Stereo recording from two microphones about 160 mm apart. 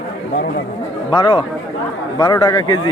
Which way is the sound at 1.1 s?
30° left (ahead or behind).